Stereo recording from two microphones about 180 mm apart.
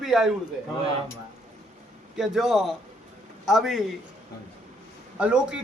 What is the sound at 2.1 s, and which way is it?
A man's voice, centre (ahead or behind).